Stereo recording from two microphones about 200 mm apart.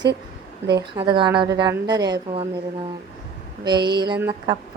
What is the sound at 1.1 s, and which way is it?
Speech, 25° right (ahead or behind).